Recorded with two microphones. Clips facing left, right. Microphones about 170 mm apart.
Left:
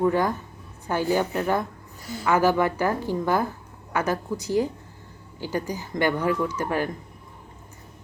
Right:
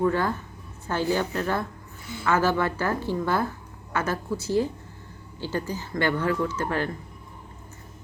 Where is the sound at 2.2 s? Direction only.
15° left (ahead or behind).